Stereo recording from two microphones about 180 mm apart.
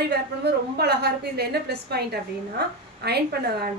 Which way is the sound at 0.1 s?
65° right (ahead or behind).